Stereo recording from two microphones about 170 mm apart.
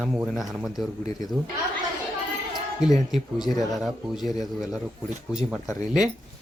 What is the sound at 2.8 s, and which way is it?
Speech, 25° left (ahead or behind).